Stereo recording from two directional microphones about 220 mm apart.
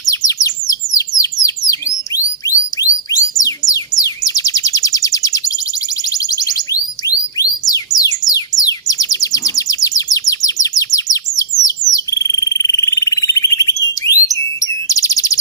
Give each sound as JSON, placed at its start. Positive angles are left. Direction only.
{"t": 0.3, "sound": "bird", "side_deg": 15}
{"t": 3.1, "sound": "music", "side_deg": 15}
{"t": 6.1, "sound": "chirp tone", "side_deg": 15}
{"t": 7.7, "sound": "music", "side_deg": 15}
{"t": 11.9, "sound": "frog", "side_deg": 15}
{"t": 14.0, "sound": "alarm", "side_deg": 10}
{"t": 14.6, "sound": "chirp", "side_deg": 15}